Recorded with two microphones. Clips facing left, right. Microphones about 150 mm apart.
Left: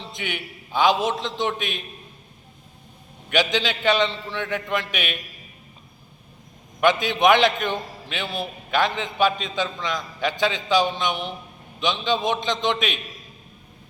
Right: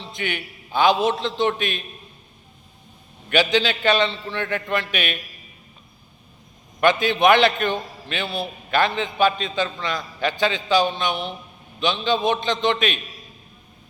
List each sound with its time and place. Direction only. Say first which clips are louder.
0.2 s a man's voice: right 3 dB; 15° left (ahead or behind)
3.2 s a man's voice: right 3 dB; 15° left (ahead or behind)
6.8 s a man's voice: right 1 dB; 15° left (ahead or behind)